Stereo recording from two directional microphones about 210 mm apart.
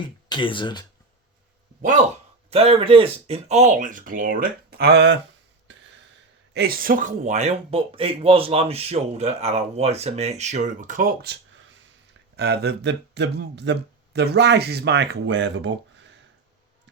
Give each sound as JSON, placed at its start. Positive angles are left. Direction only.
{"t": 0.0, "sound": "speech", "side_deg": 20}
{"t": 1.8, "sound": "speech", "side_deg": -35}
{"t": 6.5, "sound": "speech", "side_deg": -45}
{"t": 12.4, "sound": "speech", "side_deg": -50}